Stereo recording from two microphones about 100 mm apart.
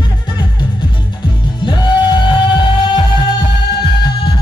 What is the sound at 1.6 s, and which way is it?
Music, 50° left (ahead or behind).